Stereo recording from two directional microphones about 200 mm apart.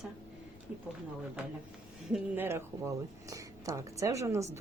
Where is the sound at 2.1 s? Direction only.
10° right (ahead or behind).